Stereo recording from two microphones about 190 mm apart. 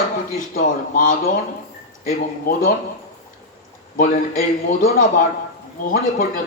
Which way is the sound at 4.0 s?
45° left (ahead or behind).